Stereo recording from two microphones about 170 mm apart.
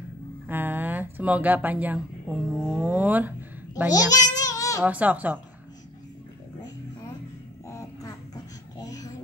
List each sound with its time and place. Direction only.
0.5 s a woman's voice: 10° right (ahead or behind)
3.9 s babbling: 20° left (ahead or behind)
4.8 s speech: 10° right (ahead or behind)
7.6 s a sound: 20° left (ahead or behind)